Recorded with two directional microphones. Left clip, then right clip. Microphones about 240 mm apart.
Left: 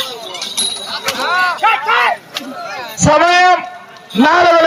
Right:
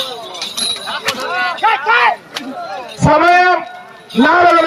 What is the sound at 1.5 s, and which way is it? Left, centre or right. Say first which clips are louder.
Speech: even; left.